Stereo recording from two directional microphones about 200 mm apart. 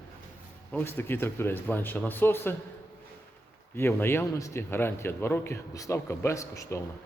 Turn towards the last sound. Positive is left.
turn(degrees=15)  # may be behind; listen again after turning